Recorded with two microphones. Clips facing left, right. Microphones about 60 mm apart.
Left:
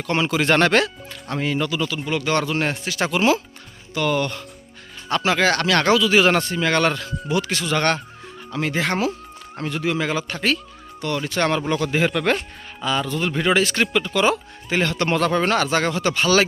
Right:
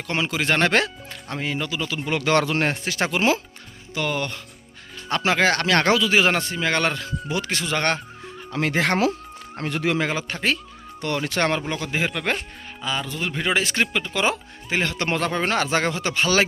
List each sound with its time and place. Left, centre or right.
0.1 s a man's voice: centre
2.2 s speech: right
2.6 s speech: right
3.9 s a man's voice: centre
5.0 s speech: right
7.3 s speech: right
8.5 s speech: right
9.6 s speech: right
10.1 s speech: right
11.0 s speech: right
11.6 s a man's voice: centre
13.6 s speech: centre